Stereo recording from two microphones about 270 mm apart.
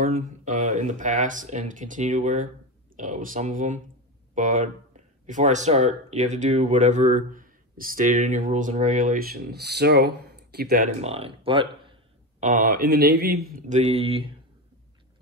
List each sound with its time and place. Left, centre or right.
0.0 s speech: right